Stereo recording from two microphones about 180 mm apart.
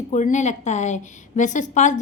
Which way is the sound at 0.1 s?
40° left (ahead or behind).